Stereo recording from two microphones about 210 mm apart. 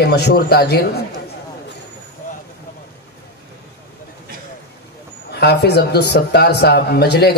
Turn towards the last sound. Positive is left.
turn(degrees=50)  # may be behind; listen again after turning